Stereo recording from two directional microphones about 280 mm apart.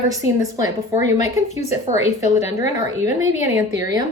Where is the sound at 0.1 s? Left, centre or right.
Centre.